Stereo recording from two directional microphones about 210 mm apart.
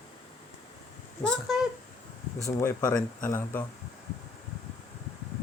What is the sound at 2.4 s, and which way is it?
Speech, 15° left (ahead or behind).